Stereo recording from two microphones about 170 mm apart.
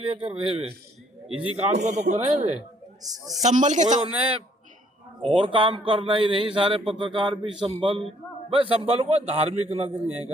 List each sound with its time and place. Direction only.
0.0 s a man's voice: 30° right (ahead or behind)
3.0 s a man's voice: 20° right (ahead or behind)
3.4 s speech: 45° right (ahead or behind)
5.2 s a man's voice: 30° right (ahead or behind)